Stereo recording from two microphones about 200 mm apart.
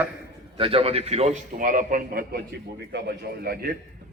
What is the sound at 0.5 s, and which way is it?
A man's voice, 30° right (ahead or behind).